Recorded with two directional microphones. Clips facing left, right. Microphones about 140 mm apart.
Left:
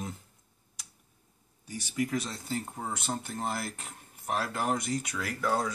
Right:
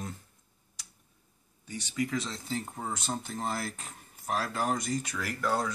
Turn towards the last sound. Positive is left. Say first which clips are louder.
# left 1 dB
turn(degrees=5)  # may be behind; listen again after turning